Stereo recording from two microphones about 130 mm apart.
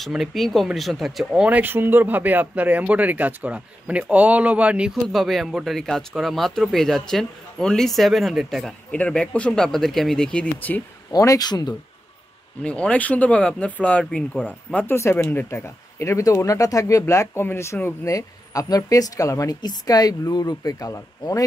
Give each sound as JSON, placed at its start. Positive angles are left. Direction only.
{"t": 0.0, "sound": "speech", "side_deg": 0}
{"t": 11.1, "sound": "speech", "side_deg": 25}
{"t": 12.6, "sound": "speech", "side_deg": 10}